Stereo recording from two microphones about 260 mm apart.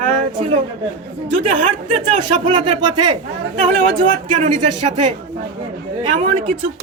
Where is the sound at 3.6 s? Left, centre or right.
Right.